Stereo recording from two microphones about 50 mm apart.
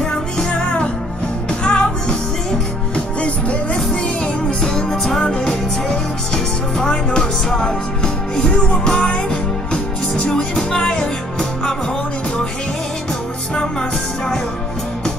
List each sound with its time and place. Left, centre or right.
0.0 s music: centre
3.2 s music: left